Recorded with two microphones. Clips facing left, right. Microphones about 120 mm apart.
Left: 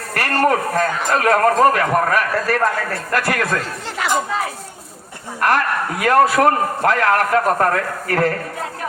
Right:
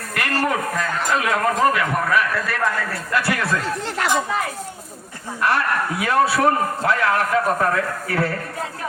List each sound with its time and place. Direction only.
0.1 s a man's voice: 45° left (ahead or behind)
5.4 s a man's voice: 50° left (ahead or behind)